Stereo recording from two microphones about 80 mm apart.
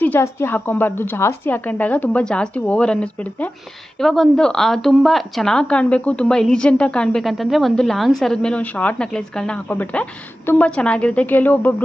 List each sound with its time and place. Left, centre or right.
0.2 s a woman's voice: left
4.0 s speech: centre
9.6 s a woman's voice: centre